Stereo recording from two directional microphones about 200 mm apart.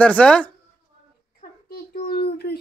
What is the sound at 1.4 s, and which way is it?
A child's voice, 50° left (ahead or behind).